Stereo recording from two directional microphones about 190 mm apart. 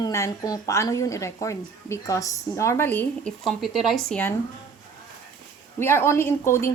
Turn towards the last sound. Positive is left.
turn(degrees=15)  # may be behind; listen again after turning